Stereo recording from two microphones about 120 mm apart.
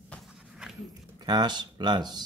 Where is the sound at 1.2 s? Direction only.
35° right (ahead or behind).